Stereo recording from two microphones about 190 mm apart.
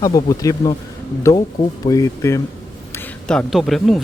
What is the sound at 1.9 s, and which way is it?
Speech, 15° left (ahead or behind).